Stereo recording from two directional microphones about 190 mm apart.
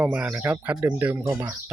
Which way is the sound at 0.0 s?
5° right (ahead or behind).